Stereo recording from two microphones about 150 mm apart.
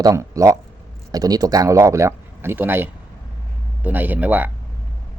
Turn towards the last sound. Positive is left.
turn(degrees=-10)  # may be behind; listen again after turning